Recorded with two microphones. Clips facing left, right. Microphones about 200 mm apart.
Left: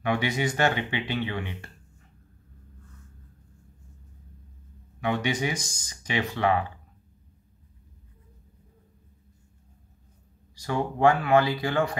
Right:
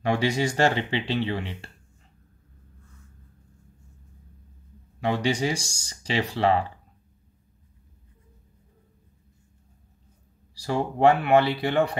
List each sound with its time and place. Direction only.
0.0 s speech: 30° right (ahead or behind)
5.0 s speech: 30° right (ahead or behind)
10.6 s speech: 25° right (ahead or behind)